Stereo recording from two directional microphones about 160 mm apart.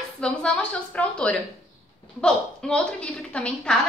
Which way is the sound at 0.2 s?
5° left (ahead or behind).